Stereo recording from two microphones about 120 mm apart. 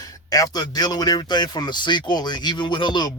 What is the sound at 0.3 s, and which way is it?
Speech, 30° left (ahead or behind).